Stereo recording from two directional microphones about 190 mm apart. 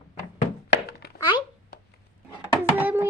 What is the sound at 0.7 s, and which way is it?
Thunk, 55° left (ahead or behind).